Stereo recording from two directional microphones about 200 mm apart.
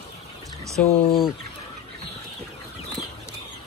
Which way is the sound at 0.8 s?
Centre (ahead or behind).